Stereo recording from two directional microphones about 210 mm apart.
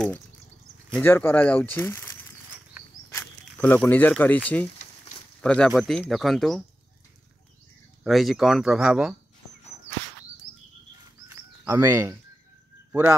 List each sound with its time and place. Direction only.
0.9 s speech: 10° left (ahead or behind)
2.8 s a sound: 10° right (ahead or behind)
3.1 s speech: 10° left (ahead or behind)
8.0 s speech: centre (ahead or behind)
11.2 s cricket: 10° right (ahead or behind)